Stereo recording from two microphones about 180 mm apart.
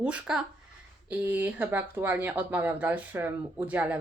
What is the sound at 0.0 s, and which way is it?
Speech, 5° right (ahead or behind).